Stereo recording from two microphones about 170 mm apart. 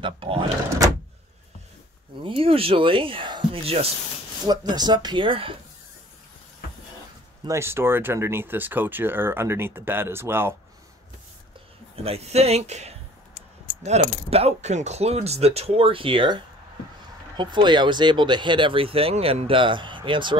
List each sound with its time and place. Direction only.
0.0 s speech: 30° right (ahead or behind)
2.2 s speech: 30° right (ahead or behind)
4.5 s speech: 25° right (ahead or behind)
7.4 s speech: 15° right (ahead or behind)
11.9 s speech: 35° right (ahead or behind)
14.3 s speech: 40° right (ahead or behind)